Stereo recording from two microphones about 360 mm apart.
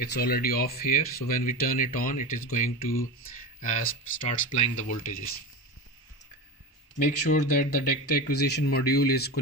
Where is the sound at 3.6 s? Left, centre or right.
Left.